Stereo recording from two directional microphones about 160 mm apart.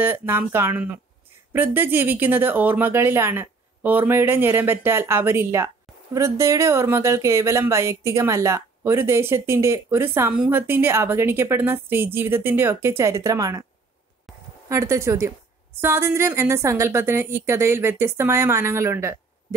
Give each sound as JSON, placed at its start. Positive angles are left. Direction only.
{"t": 0.0, "sound": "speech", "side_deg": -15}
{"t": 14.7, "sound": "speech", "side_deg": -20}